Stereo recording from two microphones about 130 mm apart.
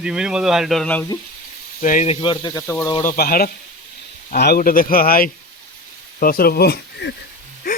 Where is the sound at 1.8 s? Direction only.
80° left.